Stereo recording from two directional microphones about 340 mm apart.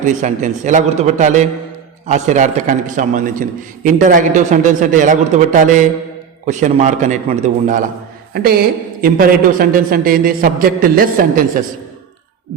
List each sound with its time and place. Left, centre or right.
0.0 s a man's voice: right